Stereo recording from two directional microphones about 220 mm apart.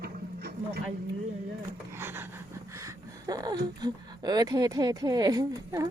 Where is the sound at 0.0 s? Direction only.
45° right (ahead or behind).